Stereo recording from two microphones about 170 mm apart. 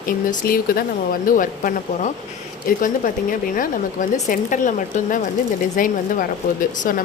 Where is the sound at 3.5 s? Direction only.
50° left (ahead or behind).